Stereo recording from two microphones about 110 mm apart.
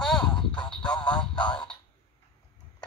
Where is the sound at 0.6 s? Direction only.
10° left (ahead or behind).